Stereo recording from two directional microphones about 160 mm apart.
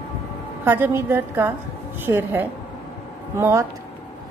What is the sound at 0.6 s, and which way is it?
A woman's voice, 15° right (ahead or behind).